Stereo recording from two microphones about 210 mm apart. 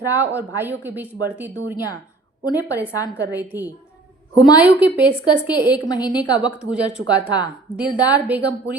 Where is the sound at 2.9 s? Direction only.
15° left (ahead or behind).